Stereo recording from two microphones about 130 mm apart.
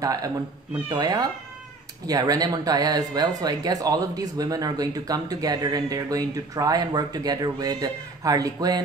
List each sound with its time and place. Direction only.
0.0 s speech: 25° right (ahead or behind)